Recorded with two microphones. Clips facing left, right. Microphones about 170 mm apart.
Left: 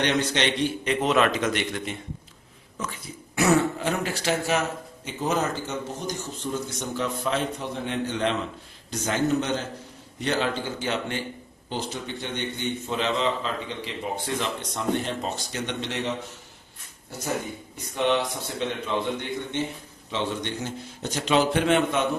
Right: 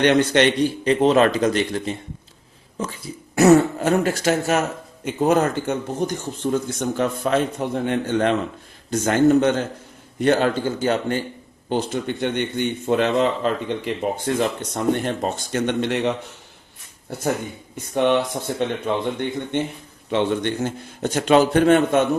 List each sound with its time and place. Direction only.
0.0 s a man's voice: 55° right (ahead or behind)
0.9 s a man's voice: 35° right (ahead or behind)
3.3 s speech: 45° right (ahead or behind)
11.7 s a man's voice: 55° right (ahead or behind)
18.5 s a man's voice: 50° right (ahead or behind)